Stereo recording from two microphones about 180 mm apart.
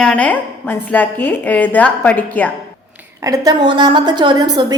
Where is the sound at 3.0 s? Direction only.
20° right (ahead or behind).